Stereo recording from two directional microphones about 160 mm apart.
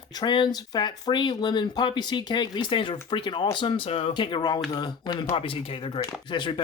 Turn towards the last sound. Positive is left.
turn(degrees=30)  # may be behind; listen again after turning